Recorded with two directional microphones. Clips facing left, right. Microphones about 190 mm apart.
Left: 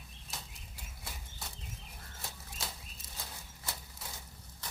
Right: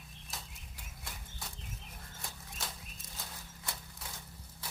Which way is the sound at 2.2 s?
5° left (ahead or behind).